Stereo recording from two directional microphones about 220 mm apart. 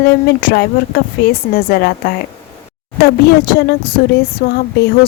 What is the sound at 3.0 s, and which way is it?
Speech, 45° left (ahead or behind).